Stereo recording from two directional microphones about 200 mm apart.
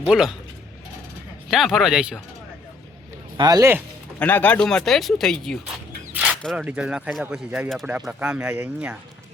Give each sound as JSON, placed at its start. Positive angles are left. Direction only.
{"t": 0.1, "sound": "speech", "side_deg": 0}
{"t": 1.5, "sound": "speech", "side_deg": 0}
{"t": 3.3, "sound": "speech", "side_deg": -20}
{"t": 4.2, "sound": "speech", "side_deg": 10}